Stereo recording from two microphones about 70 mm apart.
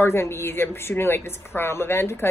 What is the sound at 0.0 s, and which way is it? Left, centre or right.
A woman's voice, left.